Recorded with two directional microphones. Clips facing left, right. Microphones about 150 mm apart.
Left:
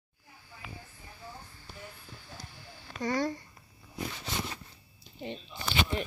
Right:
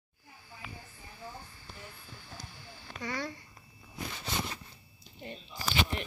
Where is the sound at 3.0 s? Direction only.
45° left (ahead or behind).